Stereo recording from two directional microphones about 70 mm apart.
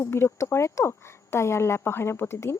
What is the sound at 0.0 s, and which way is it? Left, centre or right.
Speech, left.